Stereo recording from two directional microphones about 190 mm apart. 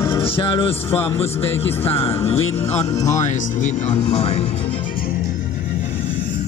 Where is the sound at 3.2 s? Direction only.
40° left (ahead or behind).